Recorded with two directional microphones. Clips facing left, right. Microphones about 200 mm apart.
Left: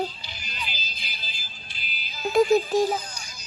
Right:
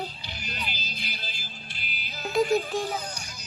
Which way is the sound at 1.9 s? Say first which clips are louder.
Left 5 dB; 60° right (ahead or behind).